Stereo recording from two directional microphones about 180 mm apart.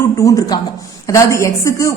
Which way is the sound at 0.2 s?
20° left (ahead or behind).